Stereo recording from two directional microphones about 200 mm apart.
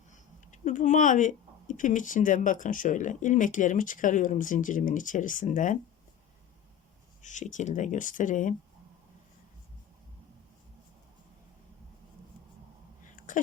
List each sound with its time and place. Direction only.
0.1 s speech: 40° left (ahead or behind)
7.2 s speech: 35° left (ahead or behind)
13.1 s a sound: 40° left (ahead or behind)